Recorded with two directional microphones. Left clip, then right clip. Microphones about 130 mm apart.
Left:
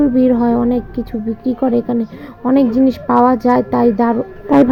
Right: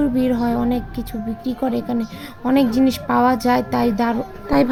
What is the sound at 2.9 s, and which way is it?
Speech, 25° left (ahead or behind).